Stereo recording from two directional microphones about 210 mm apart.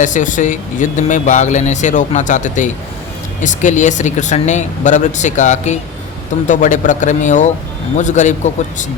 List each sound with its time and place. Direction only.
0.0 s speech: 35° left (ahead or behind)